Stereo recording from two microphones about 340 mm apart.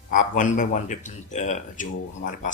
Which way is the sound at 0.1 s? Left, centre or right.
Left.